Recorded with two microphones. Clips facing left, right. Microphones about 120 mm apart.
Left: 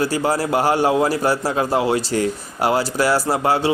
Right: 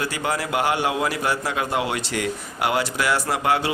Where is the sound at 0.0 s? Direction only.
35° left (ahead or behind).